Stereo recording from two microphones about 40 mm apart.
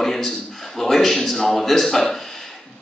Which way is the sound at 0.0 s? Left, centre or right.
Centre.